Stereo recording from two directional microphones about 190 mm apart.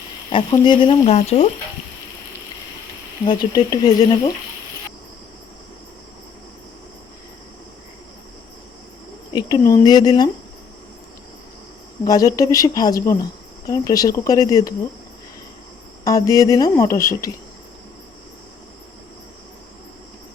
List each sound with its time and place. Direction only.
0.3 s speech: 25° left (ahead or behind)
3.2 s speech: 20° left (ahead or behind)
9.3 s speech: 20° left (ahead or behind)
12.0 s speech: 20° left (ahead or behind)
16.0 s speech: 20° left (ahead or behind)